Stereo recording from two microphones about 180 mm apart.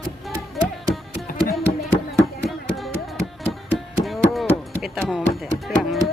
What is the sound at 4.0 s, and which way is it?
Music, centre (ahead or behind).